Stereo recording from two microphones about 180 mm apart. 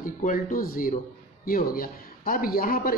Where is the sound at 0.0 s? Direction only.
50° left (ahead or behind).